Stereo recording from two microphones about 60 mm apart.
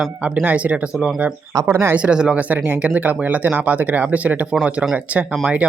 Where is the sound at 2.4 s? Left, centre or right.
Right.